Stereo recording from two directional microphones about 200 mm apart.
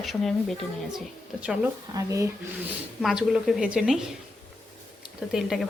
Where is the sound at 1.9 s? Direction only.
15° right (ahead or behind).